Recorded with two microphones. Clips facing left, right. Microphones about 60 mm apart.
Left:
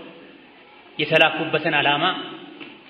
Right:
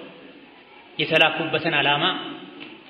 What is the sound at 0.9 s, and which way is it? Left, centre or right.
A man's voice, centre.